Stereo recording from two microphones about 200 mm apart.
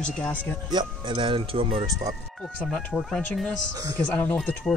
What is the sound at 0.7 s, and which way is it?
Speech, 25° right (ahead or behind).